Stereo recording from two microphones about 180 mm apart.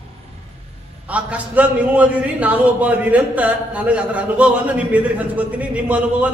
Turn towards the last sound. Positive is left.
turn(degrees=-5)  # may be behind; listen again after turning